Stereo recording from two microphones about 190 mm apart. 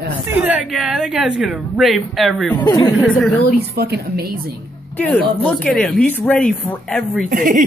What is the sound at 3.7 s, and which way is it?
Speech, 55° right (ahead or behind).